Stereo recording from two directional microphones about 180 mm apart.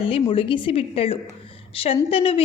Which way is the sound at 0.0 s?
30° left (ahead or behind).